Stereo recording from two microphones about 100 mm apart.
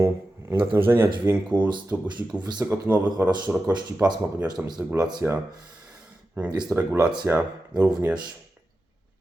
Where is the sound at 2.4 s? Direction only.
45° right (ahead or behind).